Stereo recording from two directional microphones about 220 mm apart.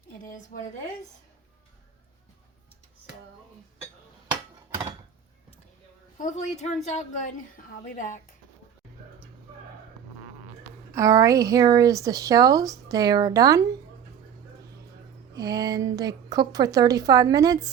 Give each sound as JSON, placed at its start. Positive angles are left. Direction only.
{"t": 0.5, "sound": "speech", "side_deg": 40}
{"t": 6.1, "sound": "a woman's voice", "side_deg": 35}
{"t": 10.9, "sound": "speech", "side_deg": -15}
{"t": 15.4, "sound": "speech", "side_deg": -15}